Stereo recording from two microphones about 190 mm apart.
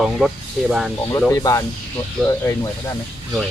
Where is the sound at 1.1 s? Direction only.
15° left (ahead or behind).